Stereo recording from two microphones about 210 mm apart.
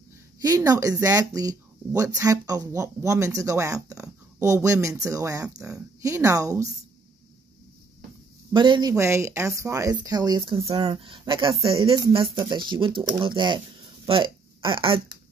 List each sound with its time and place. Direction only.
0.4 s speech: 15° right (ahead or behind)
8.5 s speech: 20° right (ahead or behind)
14.0 s a sound: 25° right (ahead or behind)